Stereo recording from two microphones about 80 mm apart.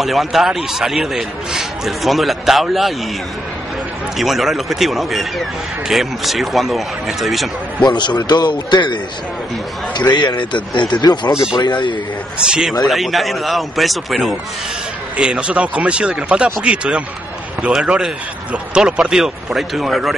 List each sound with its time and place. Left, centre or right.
0.0 s a man's voice: centre
4.2 s a man's voice: centre
7.8 s a man's voice: left
10.1 s a man's voice: left
11.5 s a man's voice: left
12.4 s a man's voice: centre
15.1 s a man's voice: centre